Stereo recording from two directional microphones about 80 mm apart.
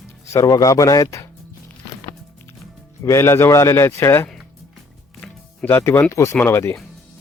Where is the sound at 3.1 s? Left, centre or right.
Left.